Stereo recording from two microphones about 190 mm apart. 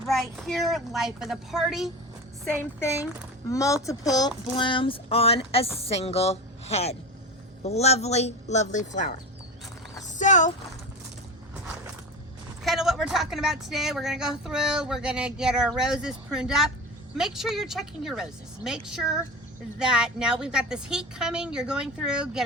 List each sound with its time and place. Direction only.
0.1 s speech: centre (ahead or behind)
3.5 s speech: 15° left (ahead or behind)
3.8 s a sound: 20° left (ahead or behind)
5.8 s speech: 35° left (ahead or behind)
10.1 s clip-clop: 40° left (ahead or behind)
12.6 s speech: centre (ahead or behind)